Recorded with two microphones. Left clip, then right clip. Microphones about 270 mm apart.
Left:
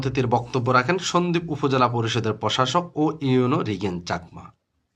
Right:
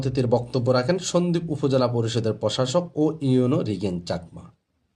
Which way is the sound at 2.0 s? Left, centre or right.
Centre.